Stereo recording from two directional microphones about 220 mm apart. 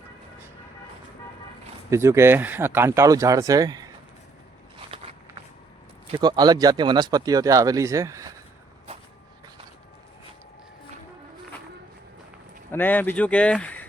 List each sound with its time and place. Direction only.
1.9 s speech: 10° right (ahead or behind)
6.1 s speech: 20° right (ahead or behind)
12.7 s speech: 10° left (ahead or behind)